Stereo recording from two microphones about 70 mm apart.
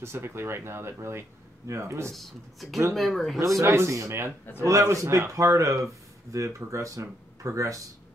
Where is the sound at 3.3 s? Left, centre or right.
Right.